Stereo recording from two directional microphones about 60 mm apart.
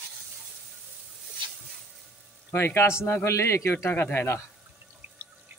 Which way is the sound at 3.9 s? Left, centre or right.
Left.